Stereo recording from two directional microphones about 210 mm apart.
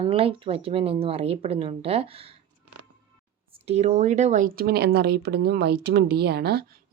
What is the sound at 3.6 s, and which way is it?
Speech, 30° right (ahead or behind).